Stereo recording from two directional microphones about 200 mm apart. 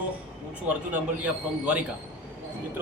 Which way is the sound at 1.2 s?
5° right (ahead or behind).